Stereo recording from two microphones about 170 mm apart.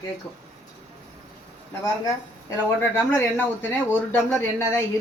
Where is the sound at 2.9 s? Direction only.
15° left (ahead or behind).